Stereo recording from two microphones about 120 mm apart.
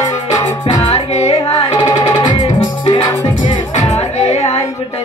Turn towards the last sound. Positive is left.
turn(degrees=65)  # may be behind; listen again after turning